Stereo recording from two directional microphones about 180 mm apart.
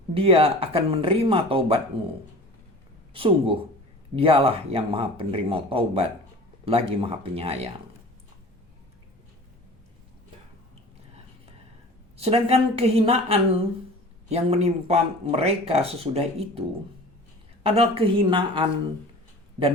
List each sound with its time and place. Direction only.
0.1 s speech: 30° right (ahead or behind)
3.2 s speech: 30° right (ahead or behind)
12.1 s speech: 35° right (ahead or behind)
17.7 s speech: 35° right (ahead or behind)